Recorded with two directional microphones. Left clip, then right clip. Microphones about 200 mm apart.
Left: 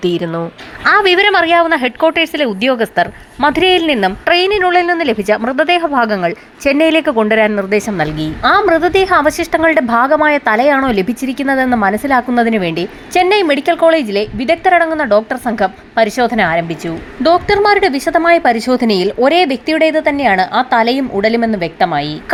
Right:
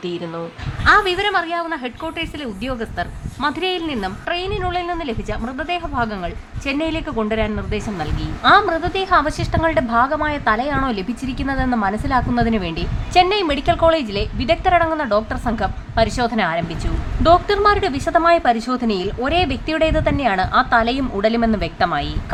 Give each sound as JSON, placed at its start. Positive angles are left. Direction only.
{"t": 0.9, "sound": "a woman's voice", "side_deg": 25}